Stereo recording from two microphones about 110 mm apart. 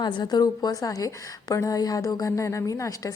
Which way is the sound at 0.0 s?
40° left (ahead or behind).